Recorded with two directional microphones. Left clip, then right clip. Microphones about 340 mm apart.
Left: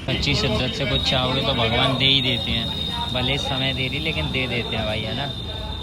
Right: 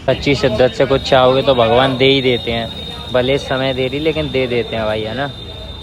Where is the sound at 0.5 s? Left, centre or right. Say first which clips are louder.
Right 10 dB; centre.